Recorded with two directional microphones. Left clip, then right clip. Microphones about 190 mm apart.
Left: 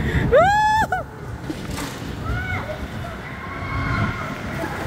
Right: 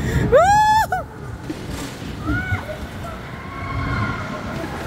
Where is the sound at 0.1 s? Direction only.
10° right (ahead or behind).